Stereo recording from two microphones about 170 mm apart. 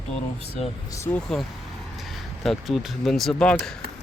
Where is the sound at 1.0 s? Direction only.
5° left (ahead or behind).